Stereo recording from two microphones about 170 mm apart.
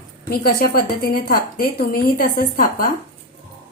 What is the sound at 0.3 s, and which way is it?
A woman's voice, 60° left (ahead or behind).